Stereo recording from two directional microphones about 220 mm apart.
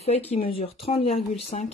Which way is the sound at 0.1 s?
30° left (ahead or behind).